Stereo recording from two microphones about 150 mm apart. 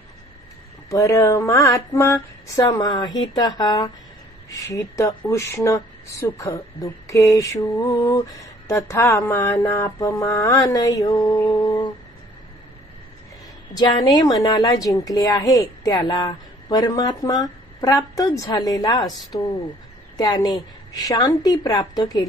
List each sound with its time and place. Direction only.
0.8 s speech: 20° left (ahead or behind)
13.7 s speech: 25° left (ahead or behind)
20.2 s speech: 25° left (ahead or behind)